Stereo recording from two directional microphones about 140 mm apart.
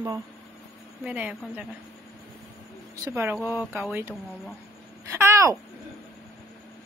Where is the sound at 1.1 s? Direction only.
10° right (ahead or behind).